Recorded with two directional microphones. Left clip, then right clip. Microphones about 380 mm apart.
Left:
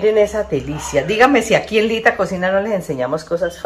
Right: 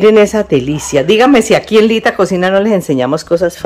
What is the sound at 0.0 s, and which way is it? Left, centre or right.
Speech, right.